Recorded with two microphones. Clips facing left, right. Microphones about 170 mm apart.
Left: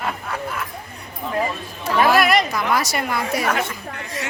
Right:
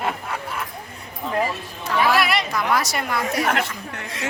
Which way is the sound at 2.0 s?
45° left (ahead or behind).